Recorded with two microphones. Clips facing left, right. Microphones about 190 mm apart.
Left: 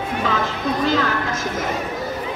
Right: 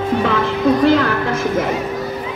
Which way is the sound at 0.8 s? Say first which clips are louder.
Right 4 dB; 60° right (ahead or behind).